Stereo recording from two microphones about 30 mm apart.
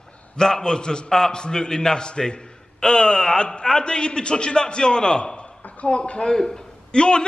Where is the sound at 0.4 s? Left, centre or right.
Left.